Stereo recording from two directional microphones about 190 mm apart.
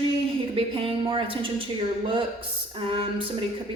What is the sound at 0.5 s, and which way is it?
A woman's voice, 30° right (ahead or behind).